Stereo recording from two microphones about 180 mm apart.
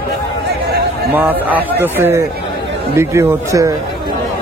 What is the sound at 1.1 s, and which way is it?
Speech, 10° right (ahead or behind).